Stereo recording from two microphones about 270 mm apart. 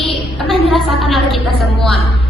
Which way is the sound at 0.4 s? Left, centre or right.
Centre.